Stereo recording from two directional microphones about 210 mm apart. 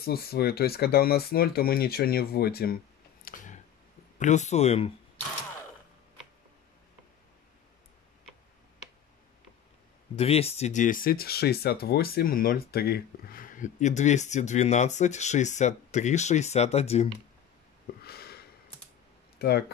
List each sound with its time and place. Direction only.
0.0 s speech: 45° left (ahead or behind); by 4.9 s 30° left (ahead or behind)
10.1 s speech: 30° left (ahead or behind)
18.0 s a sound: 50° left (ahead or behind)